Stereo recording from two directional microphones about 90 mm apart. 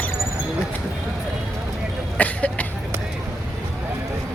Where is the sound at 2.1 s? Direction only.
15° left (ahead or behind).